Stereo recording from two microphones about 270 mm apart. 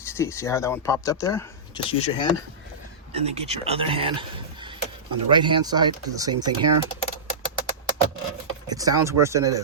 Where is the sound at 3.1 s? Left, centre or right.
Right.